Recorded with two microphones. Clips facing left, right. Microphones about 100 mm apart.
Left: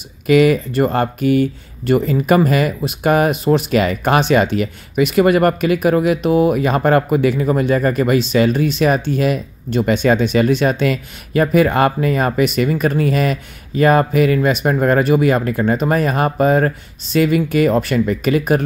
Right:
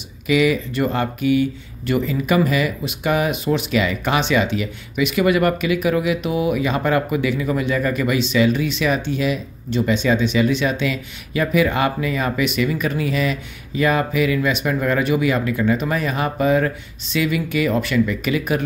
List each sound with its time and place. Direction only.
0.3 s speech: 45° left (ahead or behind)